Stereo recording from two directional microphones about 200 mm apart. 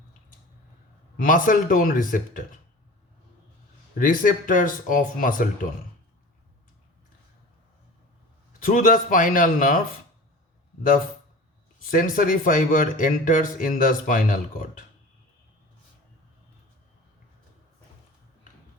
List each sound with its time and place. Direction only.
1.1 s speech: 45° left (ahead or behind)
3.9 s speech: 45° left (ahead or behind)
8.6 s speech: 45° left (ahead or behind)
11.9 s speech: 45° left (ahead or behind)